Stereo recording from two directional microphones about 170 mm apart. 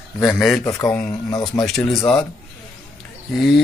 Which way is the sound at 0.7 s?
20° left (ahead or behind).